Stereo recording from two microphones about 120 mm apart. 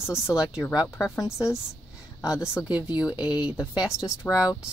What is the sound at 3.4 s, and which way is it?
Speech, 30° left (ahead or behind).